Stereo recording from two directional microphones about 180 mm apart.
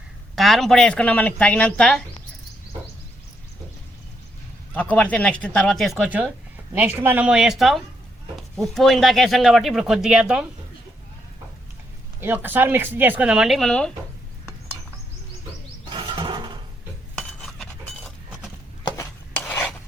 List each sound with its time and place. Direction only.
0.3 s speech: centre (ahead or behind)
4.7 s speech: 10° left (ahead or behind)
12.2 s speech: 10° right (ahead or behind)
15.9 s a sound: 25° right (ahead or behind)
17.2 s chink: centre (ahead or behind)
18.9 s rub: 15° left (ahead or behind)